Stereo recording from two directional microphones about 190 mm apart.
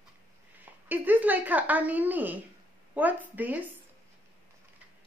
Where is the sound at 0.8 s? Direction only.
10° right (ahead or behind).